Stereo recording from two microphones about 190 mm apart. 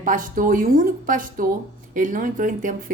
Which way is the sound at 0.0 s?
45° right (ahead or behind).